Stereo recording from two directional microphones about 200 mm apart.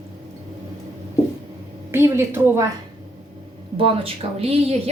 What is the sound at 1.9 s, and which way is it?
Speech, 10° right (ahead or behind).